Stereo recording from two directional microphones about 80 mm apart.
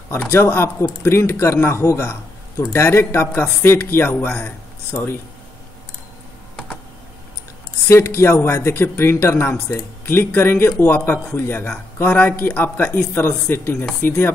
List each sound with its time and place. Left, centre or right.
0.3 s speech: left
7.9 s speech: left